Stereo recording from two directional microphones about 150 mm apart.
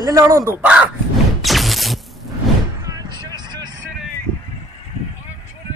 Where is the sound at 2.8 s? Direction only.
25° right (ahead or behind).